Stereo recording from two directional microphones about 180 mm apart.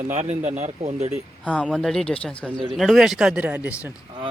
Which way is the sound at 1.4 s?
5° left (ahead or behind).